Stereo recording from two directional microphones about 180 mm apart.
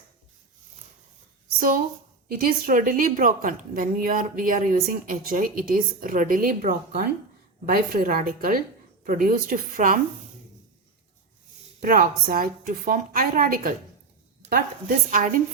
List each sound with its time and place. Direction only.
1.5 s a woman's voice: 50° right (ahead or behind)
11.8 s a woman's voice: 55° right (ahead or behind)